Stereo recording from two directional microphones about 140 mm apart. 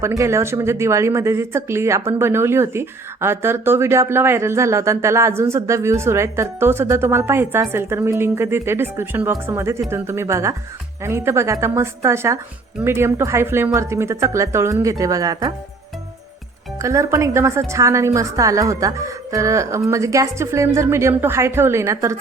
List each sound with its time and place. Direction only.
0.0 s speech: 20° right (ahead or behind)
16.7 s speech: 20° right (ahead or behind)